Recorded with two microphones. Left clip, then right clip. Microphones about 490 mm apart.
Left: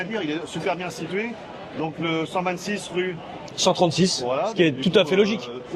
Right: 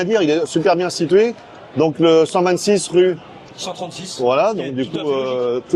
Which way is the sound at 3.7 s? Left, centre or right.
Left.